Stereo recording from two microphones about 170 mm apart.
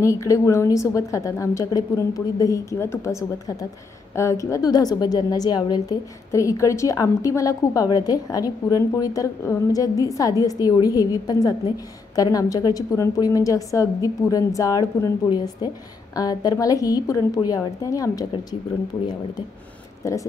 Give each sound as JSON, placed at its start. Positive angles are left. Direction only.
{"t": 0.0, "sound": "a woman's voice", "side_deg": 15}
{"t": 20.0, "sound": "a woman's voice", "side_deg": 20}